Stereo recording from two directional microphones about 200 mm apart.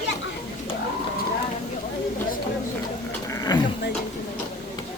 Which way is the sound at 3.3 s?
20° left (ahead or behind).